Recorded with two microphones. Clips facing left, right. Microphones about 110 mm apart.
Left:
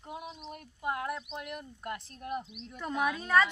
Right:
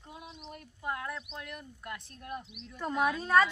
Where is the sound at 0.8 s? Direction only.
15° left (ahead or behind).